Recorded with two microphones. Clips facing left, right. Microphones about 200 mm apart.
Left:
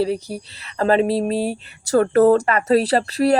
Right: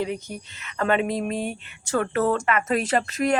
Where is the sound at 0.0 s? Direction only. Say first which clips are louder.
Left 7 dB; 35° left (ahead or behind).